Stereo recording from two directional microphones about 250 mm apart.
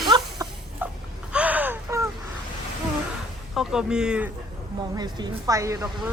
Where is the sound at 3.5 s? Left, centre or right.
Centre.